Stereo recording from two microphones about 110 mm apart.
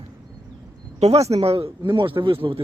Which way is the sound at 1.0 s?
70° right (ahead or behind).